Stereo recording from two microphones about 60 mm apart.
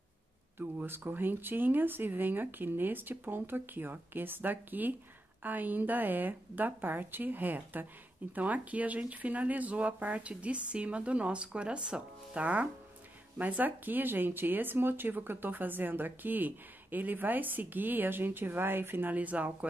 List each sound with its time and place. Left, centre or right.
0.6 s speech: right